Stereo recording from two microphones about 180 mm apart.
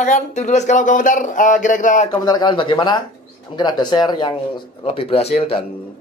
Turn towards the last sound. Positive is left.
turn(degrees=30)  # may be behind; listen again after turning